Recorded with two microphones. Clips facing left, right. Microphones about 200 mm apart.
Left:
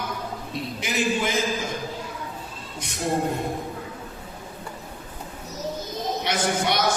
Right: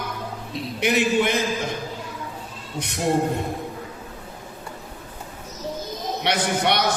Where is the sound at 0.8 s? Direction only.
65° right (ahead or behind).